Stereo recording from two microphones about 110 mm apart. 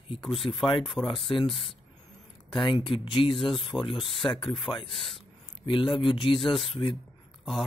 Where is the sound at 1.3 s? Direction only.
50° left (ahead or behind).